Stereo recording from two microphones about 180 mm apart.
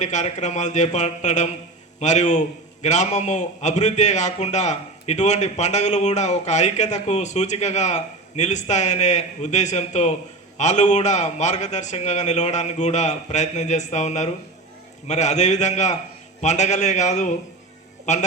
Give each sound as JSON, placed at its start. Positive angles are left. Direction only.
{"t": 0.0, "sound": "a man's voice", "side_deg": 40}